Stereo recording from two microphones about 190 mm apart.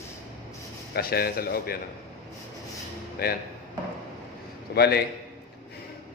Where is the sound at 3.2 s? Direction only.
55° left (ahead or behind).